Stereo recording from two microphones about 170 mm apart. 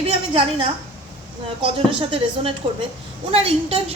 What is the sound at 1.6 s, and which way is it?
A woman's voice, 30° right (ahead or behind).